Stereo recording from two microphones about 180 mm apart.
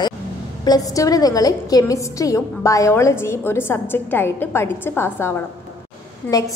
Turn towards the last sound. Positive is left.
turn(degrees=20)  # may be behind; listen again after turning